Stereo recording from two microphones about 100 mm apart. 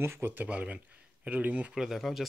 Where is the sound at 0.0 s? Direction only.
25° right (ahead or behind).